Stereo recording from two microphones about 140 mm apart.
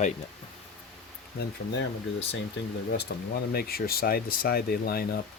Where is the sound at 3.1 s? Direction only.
90° left.